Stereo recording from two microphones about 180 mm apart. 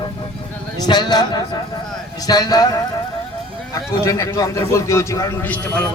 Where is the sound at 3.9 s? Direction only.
15° left (ahead or behind).